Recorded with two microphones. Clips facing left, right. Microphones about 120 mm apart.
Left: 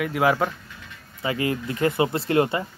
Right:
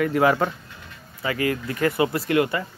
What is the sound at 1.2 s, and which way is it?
Speech, 25° left (ahead or behind).